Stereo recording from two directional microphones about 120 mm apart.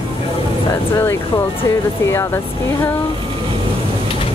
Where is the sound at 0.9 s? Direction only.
20° left (ahead or behind).